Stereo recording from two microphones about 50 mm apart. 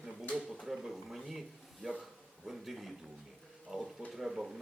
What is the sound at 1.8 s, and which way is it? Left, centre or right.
Speech, centre.